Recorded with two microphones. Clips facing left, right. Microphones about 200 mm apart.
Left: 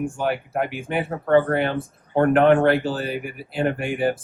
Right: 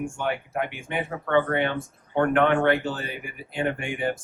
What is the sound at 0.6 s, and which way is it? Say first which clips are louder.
Speech: left 5 dB; 5° left (ahead or behind).